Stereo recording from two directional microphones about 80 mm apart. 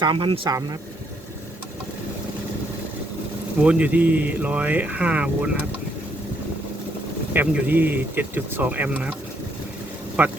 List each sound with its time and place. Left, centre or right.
0.0 s speech: right
3.6 s speech: centre
7.3 s speech: right
10.2 s speech: centre